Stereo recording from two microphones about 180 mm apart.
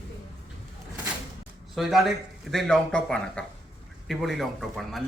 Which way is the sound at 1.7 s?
Centre (ahead or behind).